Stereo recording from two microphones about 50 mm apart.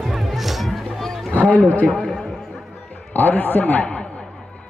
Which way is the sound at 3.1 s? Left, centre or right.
Left.